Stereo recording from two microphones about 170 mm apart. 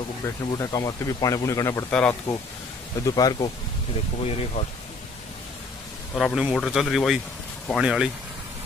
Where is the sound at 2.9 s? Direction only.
25° left (ahead or behind).